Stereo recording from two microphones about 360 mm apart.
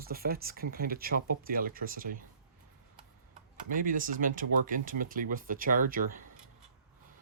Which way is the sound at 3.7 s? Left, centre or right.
Right.